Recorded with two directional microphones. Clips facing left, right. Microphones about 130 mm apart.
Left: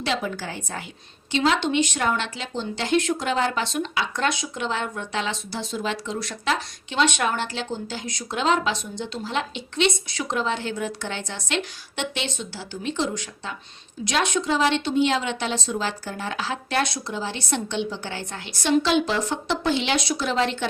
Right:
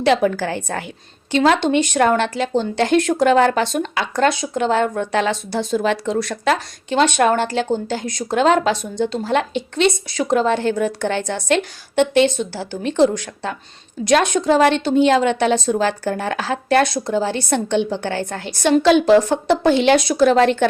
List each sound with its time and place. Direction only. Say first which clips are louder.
0.0 s a woman's voice: right 11 dB; 65° right (ahead or behind)
1.3 s speech: right 7 dB; 50° right (ahead or behind)
14.1 s speech: right 8 dB; 50° right (ahead or behind)